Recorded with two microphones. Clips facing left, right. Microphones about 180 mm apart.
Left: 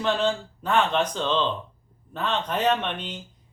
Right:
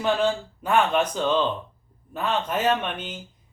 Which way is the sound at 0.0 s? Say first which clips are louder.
Right 1 dB; 10° right (ahead or behind).